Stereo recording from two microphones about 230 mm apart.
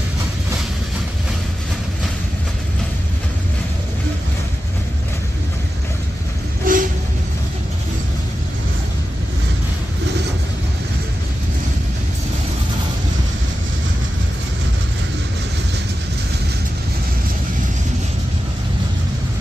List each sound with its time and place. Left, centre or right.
6.6 s train: right